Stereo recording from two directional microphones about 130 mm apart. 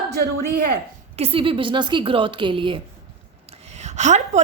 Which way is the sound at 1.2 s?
45° right (ahead or behind).